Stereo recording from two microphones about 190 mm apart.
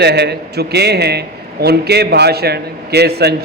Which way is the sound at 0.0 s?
60° right (ahead or behind).